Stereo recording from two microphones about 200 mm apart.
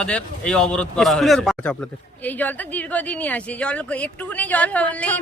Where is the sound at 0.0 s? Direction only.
5° left (ahead or behind).